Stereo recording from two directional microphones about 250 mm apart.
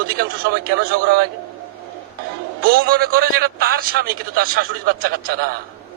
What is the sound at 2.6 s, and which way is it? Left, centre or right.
A man's voice, right.